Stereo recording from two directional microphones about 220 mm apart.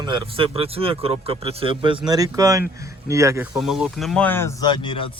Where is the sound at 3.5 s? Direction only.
Centre (ahead or behind); by 5.1 s 25° left (ahead or behind).